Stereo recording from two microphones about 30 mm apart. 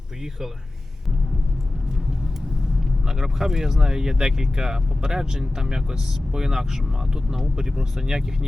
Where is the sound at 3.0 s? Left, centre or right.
Centre.